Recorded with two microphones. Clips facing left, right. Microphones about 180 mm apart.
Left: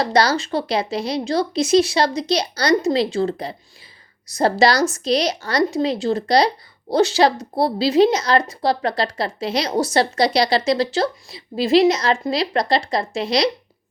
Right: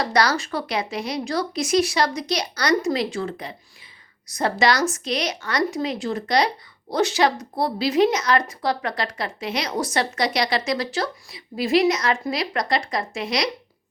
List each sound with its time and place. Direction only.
0.0 s a woman's voice: 30° left (ahead or behind)